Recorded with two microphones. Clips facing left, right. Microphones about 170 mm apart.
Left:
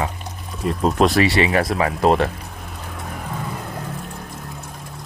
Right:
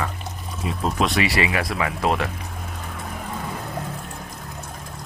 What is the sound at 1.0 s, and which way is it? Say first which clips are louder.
Speech: left 6 dB; 40° left (ahead or behind).